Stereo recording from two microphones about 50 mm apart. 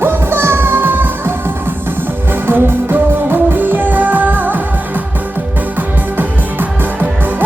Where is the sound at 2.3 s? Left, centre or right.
Right.